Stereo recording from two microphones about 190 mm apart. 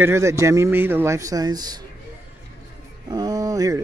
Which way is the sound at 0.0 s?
15° right (ahead or behind).